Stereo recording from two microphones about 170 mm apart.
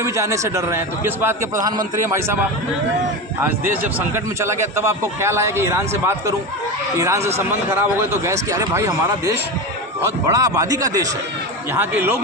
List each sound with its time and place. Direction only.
0.0 s speech: 20° right (ahead or behind)
3.7 s speech: 15° right (ahead or behind)